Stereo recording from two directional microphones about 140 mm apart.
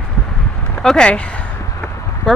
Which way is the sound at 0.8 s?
5° left (ahead or behind).